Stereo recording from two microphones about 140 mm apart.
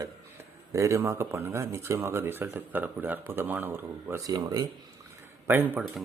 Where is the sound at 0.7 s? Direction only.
20° right (ahead or behind).